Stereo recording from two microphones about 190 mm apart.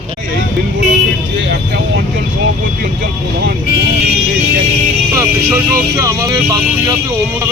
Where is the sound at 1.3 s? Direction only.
70° right (ahead or behind).